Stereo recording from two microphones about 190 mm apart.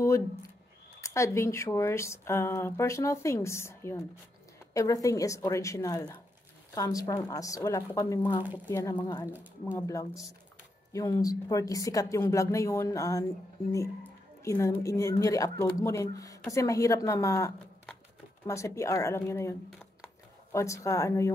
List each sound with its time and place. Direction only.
0.0 s speech: 15° left (ahead or behind)
9.3 s speech: 10° right (ahead or behind)
9.8 s speech: 15° left (ahead or behind)
18.5 s speech: 15° left (ahead or behind)